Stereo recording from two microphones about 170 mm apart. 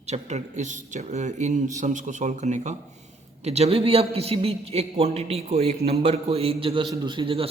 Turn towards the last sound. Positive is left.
turn(degrees=-30)  # may be behind; listen again after turning